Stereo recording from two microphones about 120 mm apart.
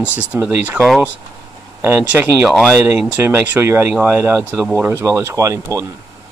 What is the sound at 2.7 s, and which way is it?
Speech, 25° right (ahead or behind).